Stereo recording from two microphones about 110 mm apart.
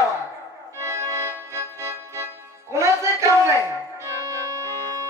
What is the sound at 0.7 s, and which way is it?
Music, 25° right (ahead or behind).